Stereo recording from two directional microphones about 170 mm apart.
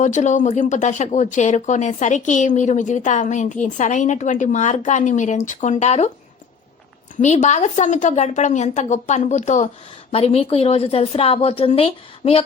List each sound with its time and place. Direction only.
0.0 s speech: 45° left (ahead or behind)
7.2 s a woman's voice: 45° left (ahead or behind)